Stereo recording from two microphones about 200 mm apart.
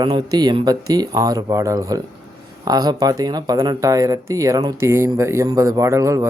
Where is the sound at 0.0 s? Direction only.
20° right (ahead or behind).